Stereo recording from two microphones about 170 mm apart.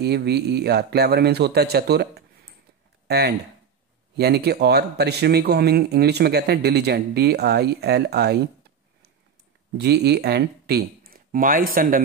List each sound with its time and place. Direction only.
0.0 s speech: 75° right (ahead or behind)
9.8 s speech: 80° right; by 12.0 s 55° right (ahead or behind)